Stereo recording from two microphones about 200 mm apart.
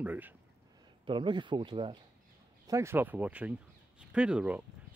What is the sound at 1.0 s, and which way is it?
Speech, 25° right (ahead or behind).